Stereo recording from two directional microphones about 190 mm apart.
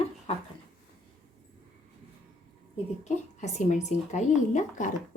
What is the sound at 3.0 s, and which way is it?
Speech, 40° left (ahead or behind).